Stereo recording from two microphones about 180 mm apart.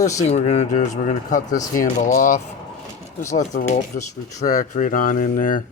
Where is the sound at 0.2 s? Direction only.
40° left (ahead or behind).